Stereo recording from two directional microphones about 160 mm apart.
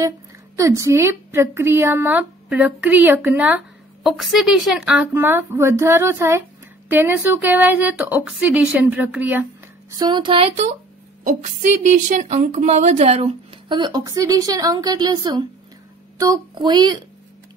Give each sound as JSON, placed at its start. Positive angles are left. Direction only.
{"t": 0.6, "sound": "a woman's voice", "side_deg": -20}
{"t": 5.1, "sound": "a woman's voice", "side_deg": -15}
{"t": 9.9, "sound": "a woman's voice", "side_deg": -30}
{"t": 11.2, "sound": "a woman's voice", "side_deg": -45}
{"t": 13.7, "sound": "a woman's voice", "side_deg": -30}